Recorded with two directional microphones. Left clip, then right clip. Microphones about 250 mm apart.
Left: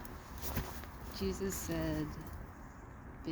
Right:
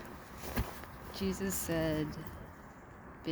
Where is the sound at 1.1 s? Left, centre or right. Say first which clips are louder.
Right 1 dB; centre.